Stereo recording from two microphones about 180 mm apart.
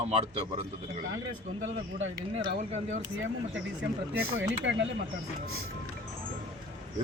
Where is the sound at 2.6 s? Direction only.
45° right (ahead or behind).